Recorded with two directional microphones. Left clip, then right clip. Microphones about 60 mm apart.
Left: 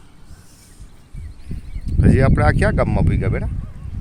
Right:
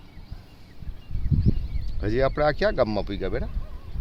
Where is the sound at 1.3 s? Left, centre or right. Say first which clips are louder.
Right 18 dB; right.